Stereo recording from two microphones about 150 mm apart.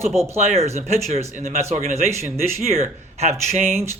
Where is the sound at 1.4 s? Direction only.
55° right (ahead or behind).